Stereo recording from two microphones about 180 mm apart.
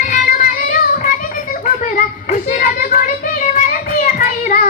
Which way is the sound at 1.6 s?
45° left (ahead or behind).